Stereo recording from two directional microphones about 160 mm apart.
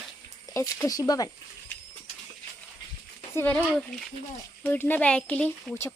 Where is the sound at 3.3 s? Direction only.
10° left (ahead or behind).